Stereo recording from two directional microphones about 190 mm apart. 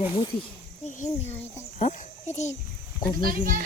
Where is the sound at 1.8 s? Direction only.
40° left (ahead or behind).